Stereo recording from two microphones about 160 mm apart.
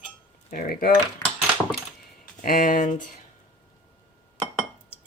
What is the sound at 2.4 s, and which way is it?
Speech, 60° left (ahead or behind).